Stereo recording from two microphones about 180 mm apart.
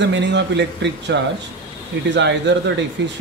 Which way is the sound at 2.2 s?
80° right.